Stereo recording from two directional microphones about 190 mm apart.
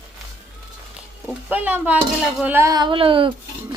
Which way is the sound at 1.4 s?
5° right (ahead or behind).